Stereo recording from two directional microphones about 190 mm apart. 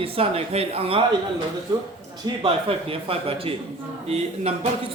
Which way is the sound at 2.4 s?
30° right (ahead or behind).